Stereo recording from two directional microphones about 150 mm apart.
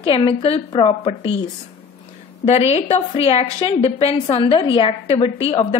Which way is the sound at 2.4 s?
45° left (ahead or behind).